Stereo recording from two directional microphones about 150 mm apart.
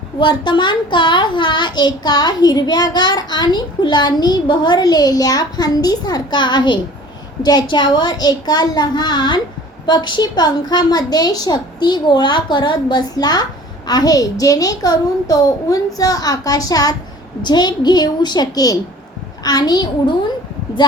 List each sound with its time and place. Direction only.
0.2 s a child's voice: 30° left (ahead or behind)